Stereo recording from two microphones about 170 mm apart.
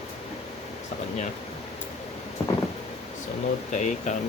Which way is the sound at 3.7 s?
45° left (ahead or behind).